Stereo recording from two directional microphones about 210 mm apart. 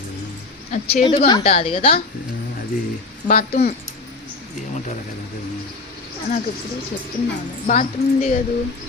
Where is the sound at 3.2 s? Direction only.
30° left (ahead or behind).